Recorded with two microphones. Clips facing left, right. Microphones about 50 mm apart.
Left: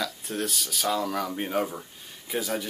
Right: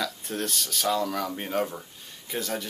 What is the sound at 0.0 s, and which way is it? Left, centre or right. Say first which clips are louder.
Speech: even; centre.